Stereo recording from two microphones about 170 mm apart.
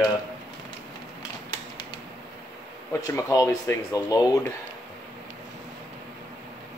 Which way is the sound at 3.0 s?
20° left (ahead or behind).